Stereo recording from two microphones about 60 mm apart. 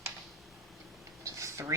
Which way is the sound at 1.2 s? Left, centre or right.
Right.